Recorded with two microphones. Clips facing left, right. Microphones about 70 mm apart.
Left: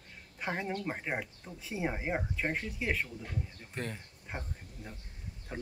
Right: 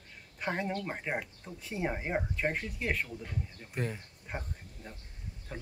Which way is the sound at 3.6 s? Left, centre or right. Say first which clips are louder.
Right 3 dB; centre.